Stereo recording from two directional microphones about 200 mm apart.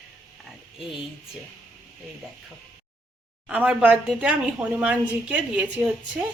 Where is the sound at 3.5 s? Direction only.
5° right (ahead or behind).